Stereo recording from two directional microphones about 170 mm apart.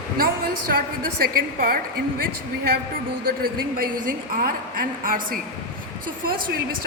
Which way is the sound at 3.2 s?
60° right (ahead or behind).